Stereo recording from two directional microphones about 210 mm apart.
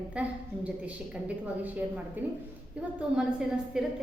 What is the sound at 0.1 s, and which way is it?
Speech, 5° right (ahead or behind).